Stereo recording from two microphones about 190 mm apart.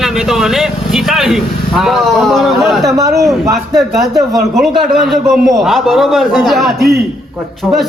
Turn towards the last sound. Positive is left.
turn(degrees=0)  # may be behind; listen again after turning